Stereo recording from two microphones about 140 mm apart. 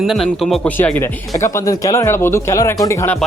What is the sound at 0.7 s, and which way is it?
A man's voice, 15° left (ahead or behind).